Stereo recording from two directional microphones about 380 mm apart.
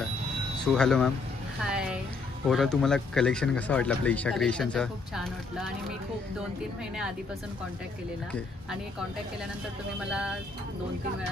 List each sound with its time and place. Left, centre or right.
0.7 s speech: centre
1.6 s a sound: centre
2.4 s speech: centre
8.3 s speech: centre
9.9 s speech: centre